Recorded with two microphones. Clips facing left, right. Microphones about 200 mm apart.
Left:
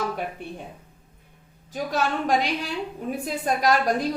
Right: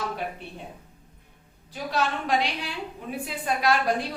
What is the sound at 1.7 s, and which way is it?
A woman's voice, 45° left (ahead or behind).